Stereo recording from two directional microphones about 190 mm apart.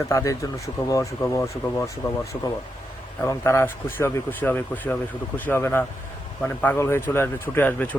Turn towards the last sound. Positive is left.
turn(degrees=10)  # may be behind; listen again after turning